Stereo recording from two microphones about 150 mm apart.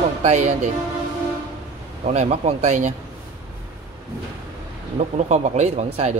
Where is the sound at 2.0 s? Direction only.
50° right (ahead or behind).